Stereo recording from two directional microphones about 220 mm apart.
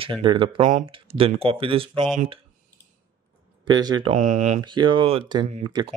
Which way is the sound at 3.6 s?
20° right (ahead or behind).